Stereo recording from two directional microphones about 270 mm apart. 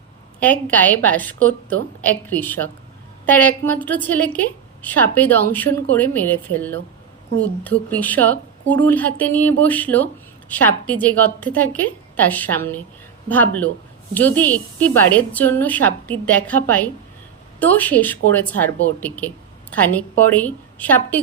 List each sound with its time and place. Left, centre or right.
0.3 s a woman's voice: centre
1.4 s speech: right
2.0 s a woman's voice: centre